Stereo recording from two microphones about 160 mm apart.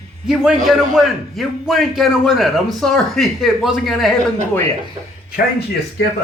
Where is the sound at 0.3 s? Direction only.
Centre (ahead or behind).